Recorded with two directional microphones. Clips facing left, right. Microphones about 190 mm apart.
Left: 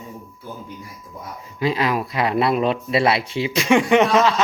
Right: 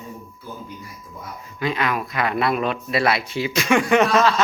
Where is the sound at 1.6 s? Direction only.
30° left (ahead or behind).